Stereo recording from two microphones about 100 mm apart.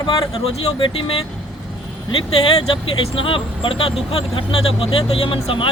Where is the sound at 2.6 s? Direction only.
70° left (ahead or behind).